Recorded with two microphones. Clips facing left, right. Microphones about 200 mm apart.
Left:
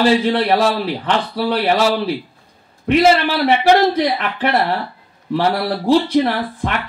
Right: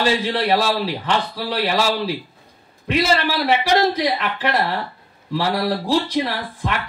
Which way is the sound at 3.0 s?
55° left (ahead or behind).